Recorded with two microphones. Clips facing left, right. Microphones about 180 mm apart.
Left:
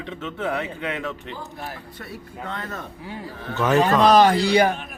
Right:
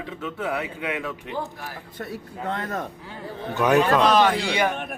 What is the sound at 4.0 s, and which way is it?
Speech, 40° left (ahead or behind).